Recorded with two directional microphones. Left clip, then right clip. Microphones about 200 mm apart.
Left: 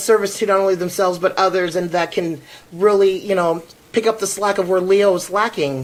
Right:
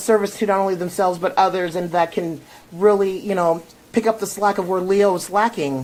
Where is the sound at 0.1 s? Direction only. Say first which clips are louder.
Left 2 dB; 30° right (ahead or behind).